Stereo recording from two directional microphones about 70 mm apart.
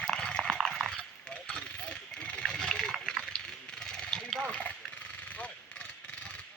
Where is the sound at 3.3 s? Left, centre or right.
Centre.